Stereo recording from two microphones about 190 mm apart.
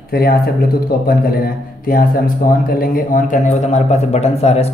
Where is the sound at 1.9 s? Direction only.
50° left (ahead or behind).